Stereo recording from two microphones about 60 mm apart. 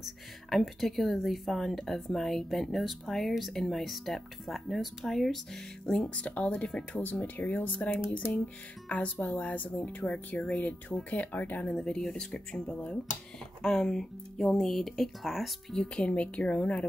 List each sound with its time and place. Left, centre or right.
0.0 s a woman's voice: centre; by 11.7 s left
11.7 s speech: centre